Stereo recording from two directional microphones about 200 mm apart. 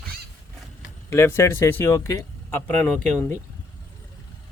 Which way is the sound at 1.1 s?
15° left (ahead or behind).